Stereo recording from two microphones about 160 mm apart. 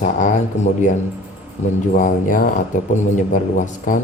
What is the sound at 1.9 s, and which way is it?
Speech, 55° left (ahead or behind).